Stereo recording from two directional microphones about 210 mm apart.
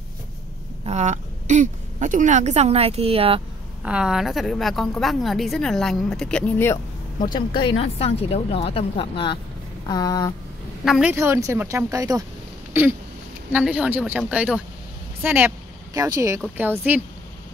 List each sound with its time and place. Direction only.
0.8 s a woman's voice: 35° right (ahead or behind)
3.8 s a woman's voice: 5° right (ahead or behind)
7.3 s a woman's voice: 20° left (ahead or behind)
9.8 s a sound: 20° left (ahead or behind)
10.9 s a woman's voice: 5° right (ahead or behind)
13.5 s a woman's voice: 5° right (ahead or behind)